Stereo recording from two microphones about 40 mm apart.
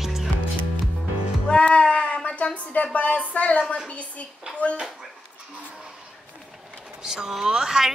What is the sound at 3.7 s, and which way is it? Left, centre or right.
Speech, left.